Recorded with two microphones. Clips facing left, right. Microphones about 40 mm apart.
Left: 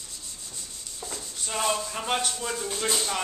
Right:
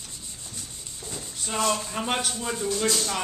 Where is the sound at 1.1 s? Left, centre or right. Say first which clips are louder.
Right 2 dB; centre.